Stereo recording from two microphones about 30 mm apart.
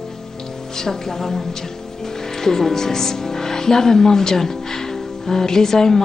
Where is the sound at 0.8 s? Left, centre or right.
Centre.